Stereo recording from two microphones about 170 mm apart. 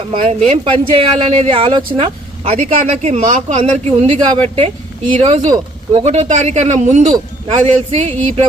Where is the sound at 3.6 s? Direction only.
35° right (ahead or behind).